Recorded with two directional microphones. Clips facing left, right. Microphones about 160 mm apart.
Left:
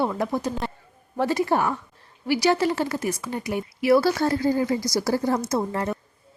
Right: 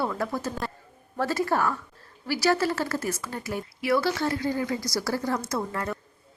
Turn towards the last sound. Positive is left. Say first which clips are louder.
# left 5 dB
turn(degrees=25)  # may be behind; listen again after turning